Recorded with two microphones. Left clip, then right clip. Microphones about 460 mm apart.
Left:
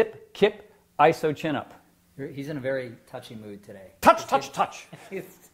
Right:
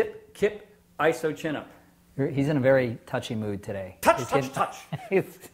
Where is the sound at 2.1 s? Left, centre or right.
Right.